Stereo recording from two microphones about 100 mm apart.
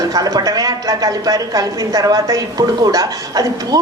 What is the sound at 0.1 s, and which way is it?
A woman's voice, 40° right (ahead or behind).